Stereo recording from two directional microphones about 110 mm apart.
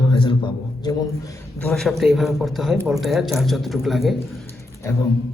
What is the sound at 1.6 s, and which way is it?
A man's voice, 5° left (ahead or behind).